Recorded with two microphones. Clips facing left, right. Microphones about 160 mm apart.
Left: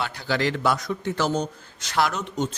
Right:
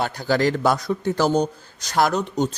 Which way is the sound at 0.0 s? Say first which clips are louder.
Right 5 dB; 45° right (ahead or behind).